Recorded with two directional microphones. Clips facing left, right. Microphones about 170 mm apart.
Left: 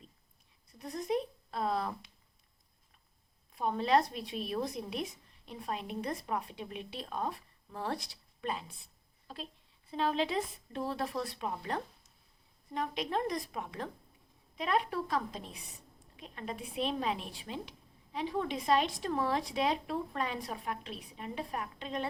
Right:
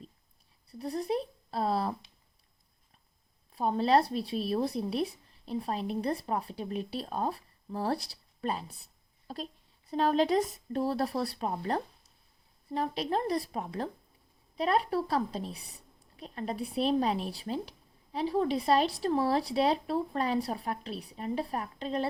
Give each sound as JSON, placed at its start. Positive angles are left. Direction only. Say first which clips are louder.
{"t": 0.7, "sound": "speech", "louder": "right 2 dB", "side_deg": -35}
{"t": 3.5, "sound": "speech", "louder": "right 3 dB", "side_deg": -35}